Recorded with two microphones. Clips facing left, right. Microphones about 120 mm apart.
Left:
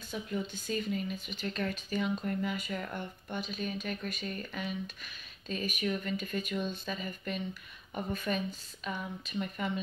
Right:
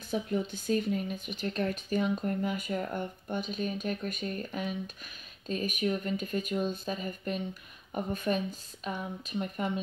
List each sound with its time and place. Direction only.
0.1 s speech: 50° right (ahead or behind)